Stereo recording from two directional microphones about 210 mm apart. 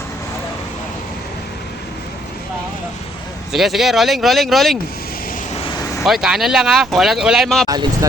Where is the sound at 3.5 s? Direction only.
Centre (ahead or behind).